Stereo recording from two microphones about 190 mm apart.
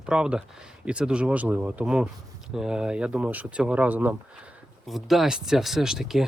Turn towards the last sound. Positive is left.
turn(degrees=0)  # may be behind; listen again after turning